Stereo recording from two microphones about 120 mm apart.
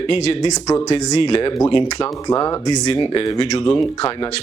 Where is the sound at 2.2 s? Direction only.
30° left (ahead or behind).